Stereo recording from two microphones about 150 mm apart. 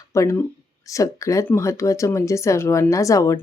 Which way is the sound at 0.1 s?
20° left (ahead or behind).